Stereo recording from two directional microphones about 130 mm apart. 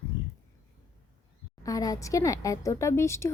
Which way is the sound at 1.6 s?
25° left (ahead or behind).